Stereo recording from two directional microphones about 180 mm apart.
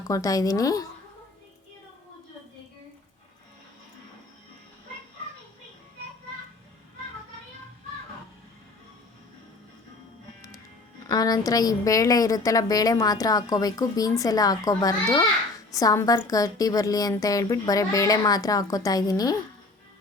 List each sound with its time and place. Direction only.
0.1 s a woman's voice: 20° left (ahead or behind)
11.0 s a woman's voice: 20° left (ahead or behind)